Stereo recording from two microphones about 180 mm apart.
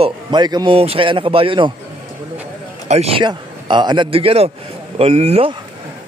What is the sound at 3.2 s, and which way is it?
A man's voice, 25° right (ahead or behind).